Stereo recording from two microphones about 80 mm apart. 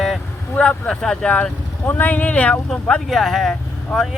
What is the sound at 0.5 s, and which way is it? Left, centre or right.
Speech, centre.